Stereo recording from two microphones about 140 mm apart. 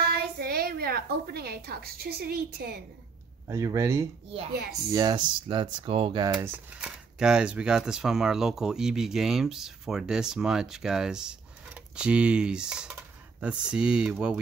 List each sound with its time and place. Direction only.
0.1 s a woman's voice: 90° right
3.4 s speech: 20° right (ahead or behind)
4.9 s speech: 30° right (ahead or behind)
6.3 s speech: 10° right (ahead or behind)